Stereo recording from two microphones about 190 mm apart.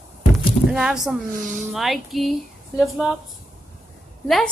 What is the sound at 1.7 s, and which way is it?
Speech, centre (ahead or behind).